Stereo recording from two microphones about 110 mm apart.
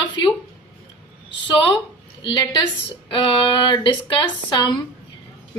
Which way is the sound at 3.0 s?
50° left (ahead or behind).